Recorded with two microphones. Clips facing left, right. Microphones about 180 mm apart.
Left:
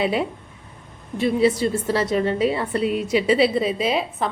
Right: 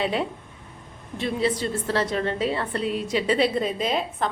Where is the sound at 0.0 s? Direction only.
10° left (ahead or behind).